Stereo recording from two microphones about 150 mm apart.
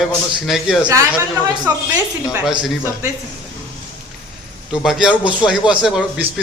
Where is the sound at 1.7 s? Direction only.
20° right (ahead or behind).